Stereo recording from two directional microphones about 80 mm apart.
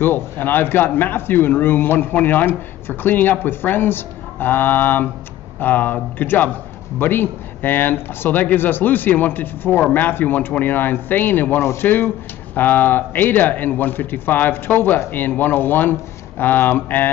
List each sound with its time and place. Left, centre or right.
0.0 s a man's voice: left